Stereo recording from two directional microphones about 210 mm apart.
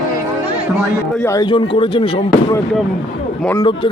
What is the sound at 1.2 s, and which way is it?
Speech, 15° left (ahead or behind).